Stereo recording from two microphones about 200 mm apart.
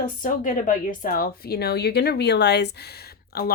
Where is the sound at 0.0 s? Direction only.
45° left (ahead or behind).